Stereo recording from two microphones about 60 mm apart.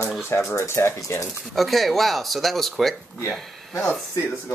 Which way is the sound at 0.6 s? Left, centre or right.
Left.